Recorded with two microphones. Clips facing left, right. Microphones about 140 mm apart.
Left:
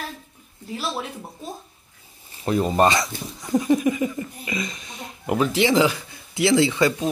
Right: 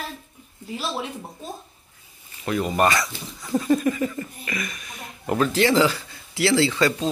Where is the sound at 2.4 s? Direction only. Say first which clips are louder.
Left 2 dB; 30° left (ahead or behind).